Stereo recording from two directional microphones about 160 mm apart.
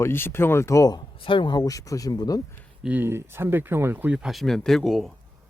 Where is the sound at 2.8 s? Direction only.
10° right (ahead or behind).